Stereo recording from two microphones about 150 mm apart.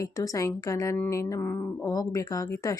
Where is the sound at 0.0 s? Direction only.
20° left (ahead or behind).